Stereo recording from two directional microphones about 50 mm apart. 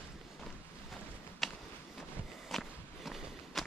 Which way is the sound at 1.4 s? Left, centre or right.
Centre.